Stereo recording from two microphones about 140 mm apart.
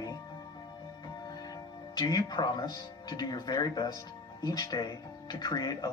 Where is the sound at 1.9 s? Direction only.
30° left (ahead or behind).